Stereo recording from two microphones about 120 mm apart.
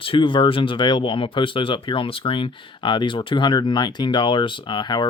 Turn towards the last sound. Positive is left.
turn(degrees=40)  # may be behind; listen again after turning